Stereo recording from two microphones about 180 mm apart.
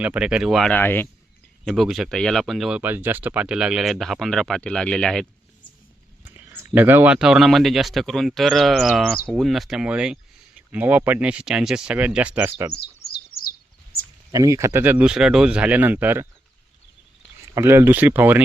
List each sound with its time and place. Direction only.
0.0 s speech: 5° right (ahead or behind); by 1.0 s 10° left (ahead or behind)
1.6 s speech: centre (ahead or behind)
6.2 s a sound: 10° right (ahead or behind)
6.7 s speech: 10° right (ahead or behind)
12.7 s chirp: 60° left (ahead or behind)
14.3 s speech: 20° right (ahead or behind)
17.5 s speech: 15° right (ahead or behind)